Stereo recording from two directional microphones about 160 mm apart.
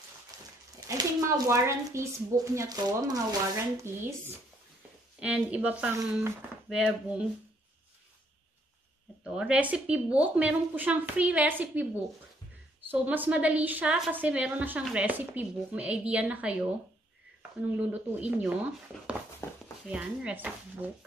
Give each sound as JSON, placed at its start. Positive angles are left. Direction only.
{"t": 0.3, "sound": "a sound", "side_deg": -25}
{"t": 0.8, "sound": "a woman's voice", "side_deg": -20}
{"t": 5.2, "sound": "a woman's voice", "side_deg": -10}
{"t": 9.2, "sound": "a woman's voice", "side_deg": -5}
{"t": 13.0, "sound": "a woman's voice", "side_deg": -10}
{"t": 19.4, "sound": "speech", "side_deg": 15}
{"t": 19.9, "sound": "a woman's voice", "side_deg": -5}